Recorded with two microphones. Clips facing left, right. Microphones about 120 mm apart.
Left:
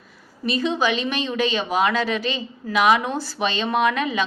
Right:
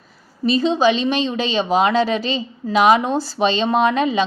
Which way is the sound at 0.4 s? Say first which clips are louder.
Right 6 dB; 30° right (ahead or behind).